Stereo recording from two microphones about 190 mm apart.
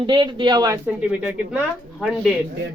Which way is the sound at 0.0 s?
25° right (ahead or behind).